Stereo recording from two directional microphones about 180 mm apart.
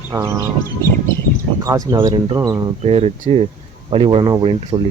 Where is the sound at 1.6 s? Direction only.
20° right (ahead or behind).